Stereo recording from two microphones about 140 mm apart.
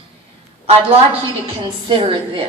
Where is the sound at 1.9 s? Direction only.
40° right (ahead or behind).